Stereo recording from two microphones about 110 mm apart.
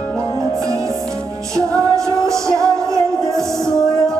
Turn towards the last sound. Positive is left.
turn(degrees=-30)  # may be behind; listen again after turning